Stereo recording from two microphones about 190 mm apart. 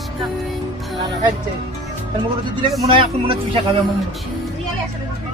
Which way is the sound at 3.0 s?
30° right (ahead or behind).